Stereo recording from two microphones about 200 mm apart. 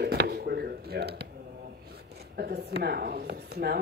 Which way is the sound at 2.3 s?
50° right (ahead or behind).